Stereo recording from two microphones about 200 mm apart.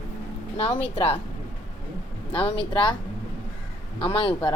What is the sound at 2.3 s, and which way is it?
Speech, 25° left (ahead or behind).